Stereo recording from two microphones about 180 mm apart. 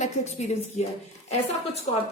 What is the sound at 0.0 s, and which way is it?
Speech, 35° left (ahead or behind).